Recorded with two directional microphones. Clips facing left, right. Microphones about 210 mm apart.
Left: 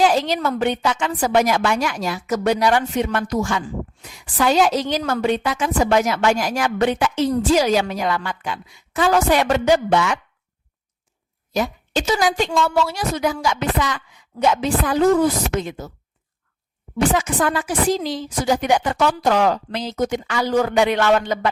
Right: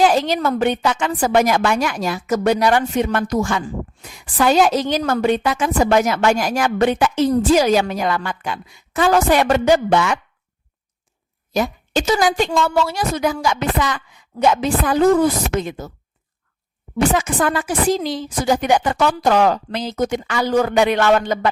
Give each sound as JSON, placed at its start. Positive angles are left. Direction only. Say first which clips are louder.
{"t": 0.0, "sound": "a woman's voice", "louder": "right 2 dB", "side_deg": -50}
{"t": 11.5, "sound": "a woman's voice", "louder": "right 2 dB", "side_deg": -50}
{"t": 17.2, "sound": "a woman's voice", "louder": "right 1 dB", "side_deg": -50}